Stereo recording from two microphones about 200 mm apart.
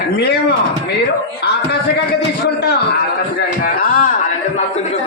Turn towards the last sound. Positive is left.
turn(degrees=45)  # may be behind; listen again after turning